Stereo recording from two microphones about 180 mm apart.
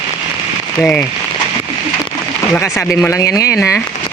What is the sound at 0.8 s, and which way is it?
Speech, 10° left (ahead or behind).